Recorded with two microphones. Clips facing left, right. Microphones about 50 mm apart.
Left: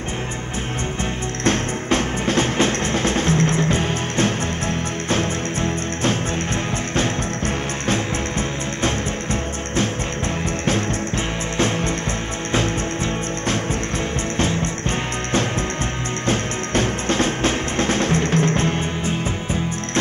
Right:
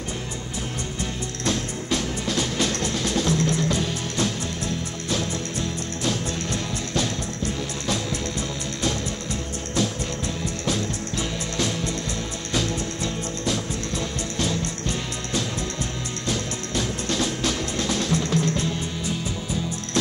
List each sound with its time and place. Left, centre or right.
1.4 s music: left
14.4 s music: left